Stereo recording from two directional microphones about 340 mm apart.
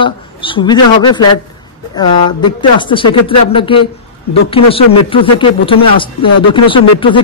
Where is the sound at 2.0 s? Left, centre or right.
Centre.